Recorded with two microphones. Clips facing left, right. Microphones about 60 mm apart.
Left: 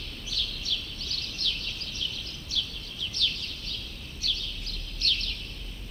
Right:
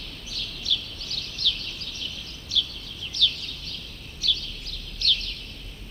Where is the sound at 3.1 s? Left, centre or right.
Left.